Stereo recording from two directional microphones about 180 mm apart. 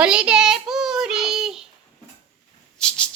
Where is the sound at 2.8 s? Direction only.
5° left (ahead or behind).